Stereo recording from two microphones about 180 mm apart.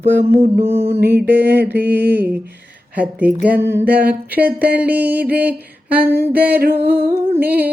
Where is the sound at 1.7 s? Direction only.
10° right (ahead or behind).